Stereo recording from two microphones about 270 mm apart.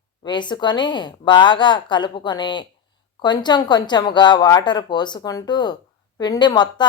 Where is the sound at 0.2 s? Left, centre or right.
Centre.